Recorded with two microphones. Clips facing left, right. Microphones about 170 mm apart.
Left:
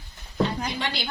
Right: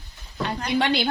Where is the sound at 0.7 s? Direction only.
65° right (ahead or behind).